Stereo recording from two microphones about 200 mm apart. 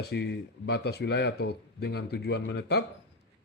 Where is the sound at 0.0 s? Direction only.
55° left (ahead or behind).